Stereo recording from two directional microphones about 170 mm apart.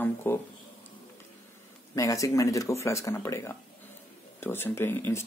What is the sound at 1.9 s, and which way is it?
Speech, 20° left (ahead or behind).